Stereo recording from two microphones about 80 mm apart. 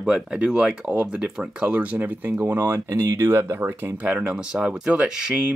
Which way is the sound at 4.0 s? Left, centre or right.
Centre.